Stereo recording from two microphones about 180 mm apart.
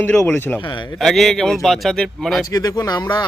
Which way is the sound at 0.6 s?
25° left (ahead or behind).